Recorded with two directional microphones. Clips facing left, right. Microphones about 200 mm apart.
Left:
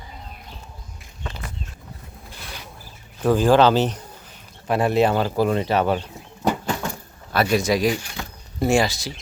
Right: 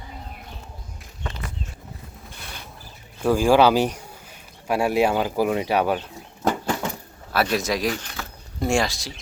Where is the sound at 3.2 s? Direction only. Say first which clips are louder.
Left 1 dB; 10° right (ahead or behind).